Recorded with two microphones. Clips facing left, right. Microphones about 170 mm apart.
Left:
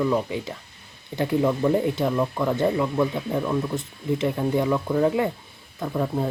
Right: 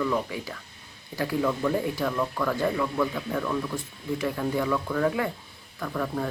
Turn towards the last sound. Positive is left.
turn(degrees=25)  # may be behind; listen again after turning